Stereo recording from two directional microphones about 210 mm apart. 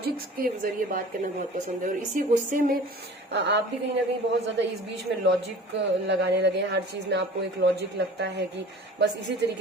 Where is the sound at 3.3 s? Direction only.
55° right (ahead or behind).